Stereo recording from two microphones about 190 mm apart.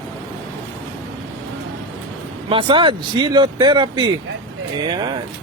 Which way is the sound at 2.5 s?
30° right (ahead or behind).